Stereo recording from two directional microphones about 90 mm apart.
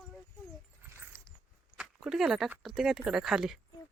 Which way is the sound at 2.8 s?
5° right (ahead or behind).